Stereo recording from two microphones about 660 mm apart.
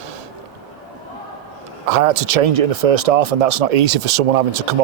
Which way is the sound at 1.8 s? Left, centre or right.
Right.